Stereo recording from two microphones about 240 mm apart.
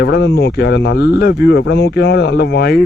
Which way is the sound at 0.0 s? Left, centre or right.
Left.